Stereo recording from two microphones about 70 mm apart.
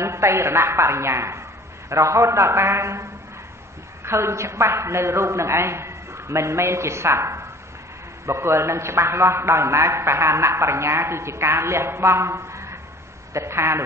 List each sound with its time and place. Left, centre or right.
0.0 s a man's voice: right